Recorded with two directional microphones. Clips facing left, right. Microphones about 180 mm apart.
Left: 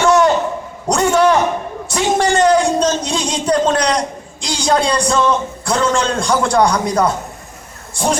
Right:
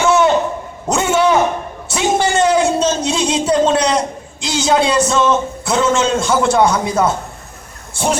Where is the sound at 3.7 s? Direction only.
5° right (ahead or behind).